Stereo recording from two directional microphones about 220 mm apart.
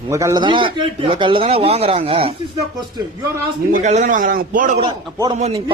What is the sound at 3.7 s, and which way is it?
A man's voice, 35° right (ahead or behind).